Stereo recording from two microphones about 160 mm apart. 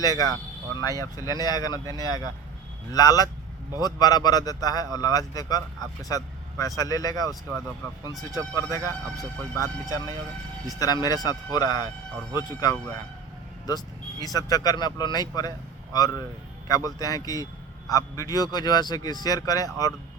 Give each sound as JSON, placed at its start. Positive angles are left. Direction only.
{"t": 0.0, "sound": "a man's voice", "side_deg": 25}
{"t": 14.3, "sound": "a man's voice", "side_deg": 25}